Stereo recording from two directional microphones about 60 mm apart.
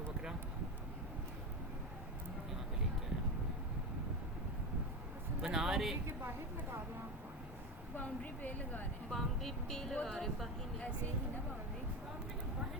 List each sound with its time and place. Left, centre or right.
5.4 s a sound: centre
7.9 s speech: left
9.0 s speech: centre